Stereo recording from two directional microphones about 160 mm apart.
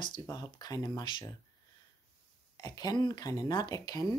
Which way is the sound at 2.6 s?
25° left (ahead or behind).